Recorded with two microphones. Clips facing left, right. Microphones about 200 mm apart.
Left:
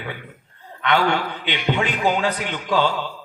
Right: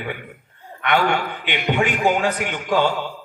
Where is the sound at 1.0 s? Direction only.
50° right (ahead or behind).